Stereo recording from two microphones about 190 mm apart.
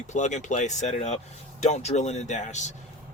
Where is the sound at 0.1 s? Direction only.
40° left (ahead or behind).